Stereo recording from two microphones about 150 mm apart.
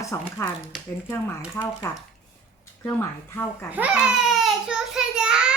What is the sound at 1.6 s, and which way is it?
Speech, 15° left (ahead or behind).